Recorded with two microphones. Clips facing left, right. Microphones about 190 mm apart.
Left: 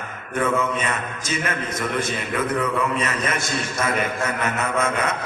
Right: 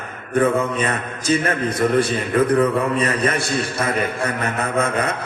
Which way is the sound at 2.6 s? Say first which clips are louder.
Right 5 dB; 35° right (ahead or behind).